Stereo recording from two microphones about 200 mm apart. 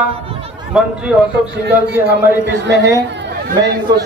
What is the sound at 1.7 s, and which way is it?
A man's voice, 55° right (ahead or behind).